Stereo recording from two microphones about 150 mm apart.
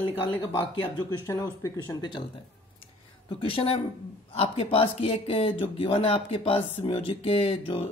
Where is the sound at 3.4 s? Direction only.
35° left (ahead or behind).